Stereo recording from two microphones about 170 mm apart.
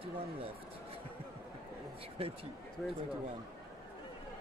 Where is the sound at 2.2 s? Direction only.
35° right (ahead or behind).